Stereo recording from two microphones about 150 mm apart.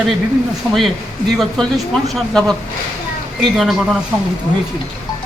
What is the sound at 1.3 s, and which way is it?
Speech, centre (ahead or behind).